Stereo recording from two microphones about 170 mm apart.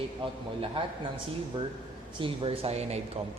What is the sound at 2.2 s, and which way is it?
Speech, 35° right (ahead or behind).